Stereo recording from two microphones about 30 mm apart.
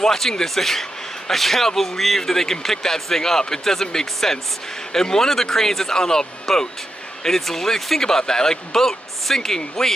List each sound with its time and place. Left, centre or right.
0.0 s a man's voice: centre